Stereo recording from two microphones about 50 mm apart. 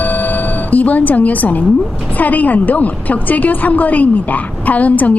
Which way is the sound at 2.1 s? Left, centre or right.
Left.